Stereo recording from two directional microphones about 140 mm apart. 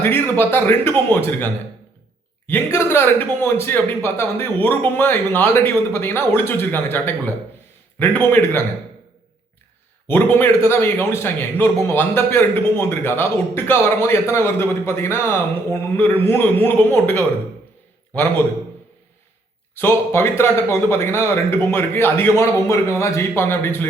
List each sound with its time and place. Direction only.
0.0 s a man's voice: 15° left (ahead or behind)
2.5 s a man's voice: 15° left (ahead or behind)
10.1 s a man's voice: 15° left (ahead or behind)
19.8 s a man's voice: 15° left (ahead or behind)